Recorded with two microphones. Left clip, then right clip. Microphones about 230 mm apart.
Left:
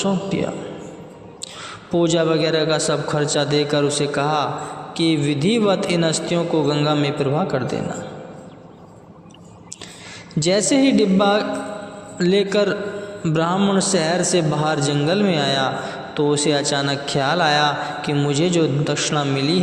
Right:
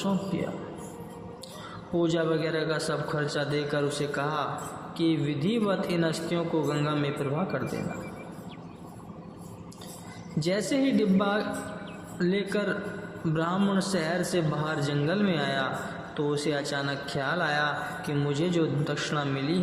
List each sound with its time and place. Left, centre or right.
2.0 s a man's voice: left
10.4 s a man's voice: left